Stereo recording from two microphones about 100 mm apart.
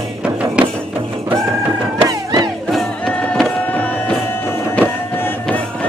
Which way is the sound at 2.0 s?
35° right (ahead or behind).